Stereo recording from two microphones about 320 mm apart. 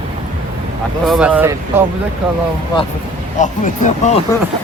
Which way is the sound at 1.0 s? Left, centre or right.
Centre.